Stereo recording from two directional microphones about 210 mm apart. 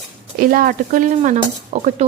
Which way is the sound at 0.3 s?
45° right (ahead or behind).